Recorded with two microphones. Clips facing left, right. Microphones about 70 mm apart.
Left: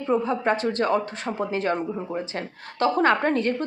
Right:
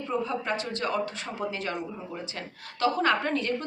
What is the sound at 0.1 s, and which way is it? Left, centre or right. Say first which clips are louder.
A woman's voice: left 7 dB; left.